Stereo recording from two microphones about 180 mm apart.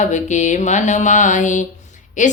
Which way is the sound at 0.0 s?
40° left (ahead or behind).